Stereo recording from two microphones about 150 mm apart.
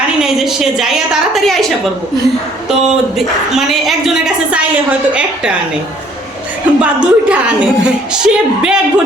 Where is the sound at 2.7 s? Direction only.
5° right (ahead or behind).